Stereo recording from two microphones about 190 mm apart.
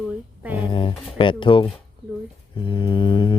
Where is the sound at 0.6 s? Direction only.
25° left (ahead or behind).